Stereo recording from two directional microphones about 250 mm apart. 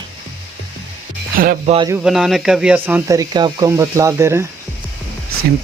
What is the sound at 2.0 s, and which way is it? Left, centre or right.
Speech, centre.